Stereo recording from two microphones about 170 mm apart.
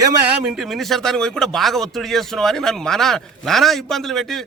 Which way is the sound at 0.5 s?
Centre (ahead or behind).